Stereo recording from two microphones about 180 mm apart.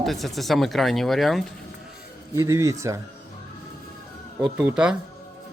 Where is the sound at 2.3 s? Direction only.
15° right (ahead or behind).